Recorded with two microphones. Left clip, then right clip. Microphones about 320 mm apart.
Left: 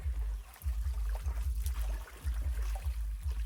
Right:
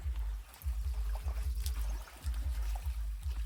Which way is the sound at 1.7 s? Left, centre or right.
Right.